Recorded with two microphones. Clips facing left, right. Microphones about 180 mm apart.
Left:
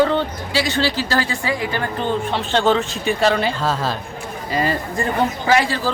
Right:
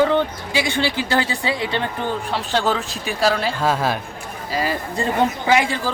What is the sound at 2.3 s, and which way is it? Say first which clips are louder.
Speech: left 4 dB; 5° right (ahead or behind).